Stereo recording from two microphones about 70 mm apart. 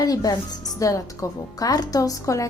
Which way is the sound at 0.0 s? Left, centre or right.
Left.